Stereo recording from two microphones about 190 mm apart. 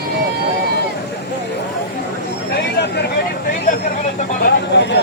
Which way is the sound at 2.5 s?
60° left (ahead or behind).